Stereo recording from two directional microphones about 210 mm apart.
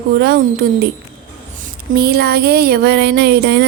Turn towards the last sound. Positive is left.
turn(degrees=-50)  # may be behind; listen again after turning